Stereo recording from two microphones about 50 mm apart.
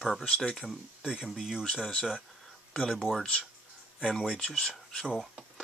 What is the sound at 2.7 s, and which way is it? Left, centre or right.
Speech, centre.